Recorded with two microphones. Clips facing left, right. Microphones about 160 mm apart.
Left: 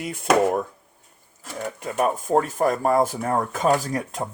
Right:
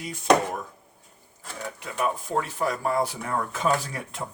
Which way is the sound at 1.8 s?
45° left (ahead or behind).